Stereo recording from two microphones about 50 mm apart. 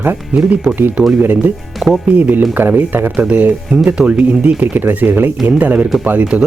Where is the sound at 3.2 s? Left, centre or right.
Right.